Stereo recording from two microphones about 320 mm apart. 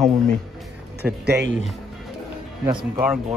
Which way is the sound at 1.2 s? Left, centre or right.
Right.